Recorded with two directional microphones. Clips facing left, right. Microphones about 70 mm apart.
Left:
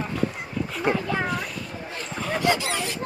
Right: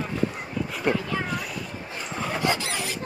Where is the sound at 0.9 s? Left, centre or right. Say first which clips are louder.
Left 1 dB; centre.